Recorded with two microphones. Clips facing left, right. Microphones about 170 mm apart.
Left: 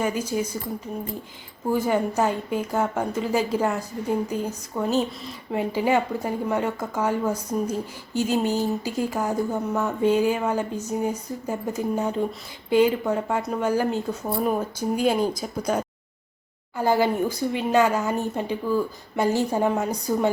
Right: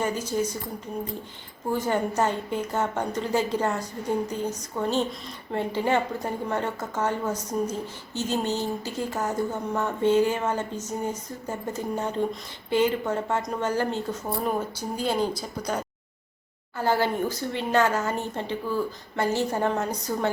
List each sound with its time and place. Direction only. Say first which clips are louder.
0.0 s speech: left 1 dB; 10° left (ahead or behind)
1.7 s speech: left 3 dB; 10° left (ahead or behind)